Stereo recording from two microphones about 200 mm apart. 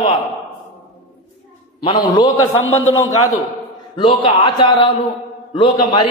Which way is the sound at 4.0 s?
25° left (ahead or behind).